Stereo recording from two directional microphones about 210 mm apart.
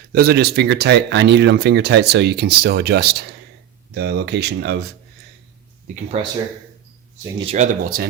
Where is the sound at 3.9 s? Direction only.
50° right (ahead or behind).